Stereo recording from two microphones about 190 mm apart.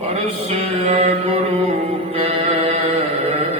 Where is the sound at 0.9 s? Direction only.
30° right (ahead or behind).